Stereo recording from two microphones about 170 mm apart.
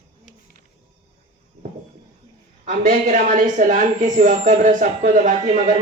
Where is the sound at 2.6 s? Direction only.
50° right (ahead or behind).